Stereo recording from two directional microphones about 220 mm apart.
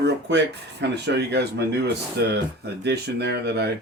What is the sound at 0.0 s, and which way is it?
Speech, 50° right (ahead or behind).